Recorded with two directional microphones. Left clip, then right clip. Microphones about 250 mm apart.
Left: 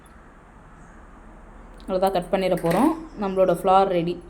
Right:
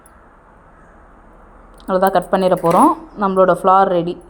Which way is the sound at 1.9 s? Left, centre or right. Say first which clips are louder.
Right 7 dB; right.